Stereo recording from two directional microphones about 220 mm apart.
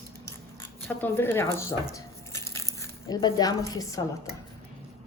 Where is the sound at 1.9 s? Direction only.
15° left (ahead or behind).